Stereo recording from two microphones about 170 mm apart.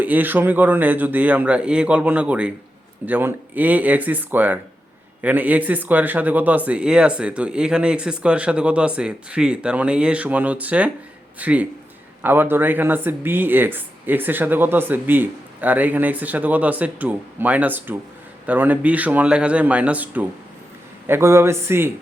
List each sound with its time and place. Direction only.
0.0 s speech: 10° right (ahead or behind)